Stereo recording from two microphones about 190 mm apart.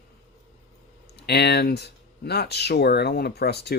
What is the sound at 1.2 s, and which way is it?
Speech, 60° left (ahead or behind).